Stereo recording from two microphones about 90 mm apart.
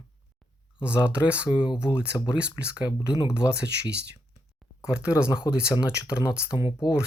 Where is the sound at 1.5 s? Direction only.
60° left (ahead or behind).